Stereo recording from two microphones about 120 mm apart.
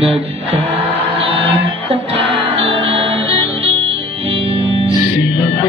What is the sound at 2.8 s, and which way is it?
Music, 50° right (ahead or behind).